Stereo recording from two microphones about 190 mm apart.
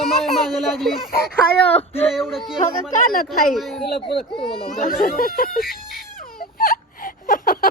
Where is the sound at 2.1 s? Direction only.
Centre (ahead or behind).